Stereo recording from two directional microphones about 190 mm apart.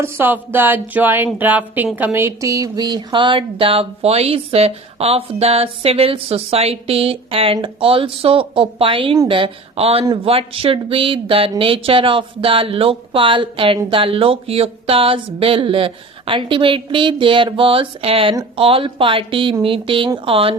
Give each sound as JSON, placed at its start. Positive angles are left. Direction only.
{"t": 0.0, "sound": "speech", "side_deg": -10}